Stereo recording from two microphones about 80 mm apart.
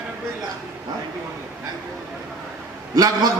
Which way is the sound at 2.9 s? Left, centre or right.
Right.